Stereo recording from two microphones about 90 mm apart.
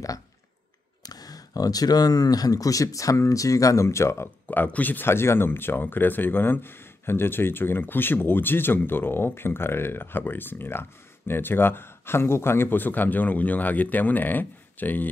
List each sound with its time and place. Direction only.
1.0 s speech: 45° left (ahead or behind)
4.5 s speech: 20° left (ahead or behind)